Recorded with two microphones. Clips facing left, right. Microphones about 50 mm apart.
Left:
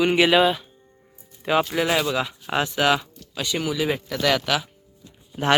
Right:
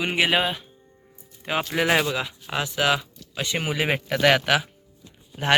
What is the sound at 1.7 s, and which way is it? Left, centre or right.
Speech, right.